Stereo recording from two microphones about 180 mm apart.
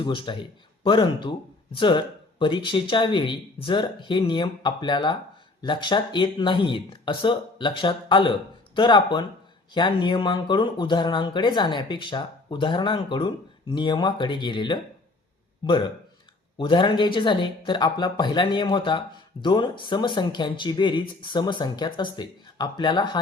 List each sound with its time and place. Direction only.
0.0 s speech: 30° left (ahead or behind)